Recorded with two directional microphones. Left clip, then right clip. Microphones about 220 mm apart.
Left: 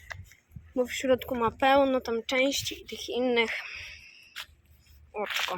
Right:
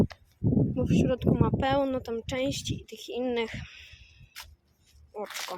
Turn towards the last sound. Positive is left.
turn(degrees=-5)  # may be behind; listen again after turning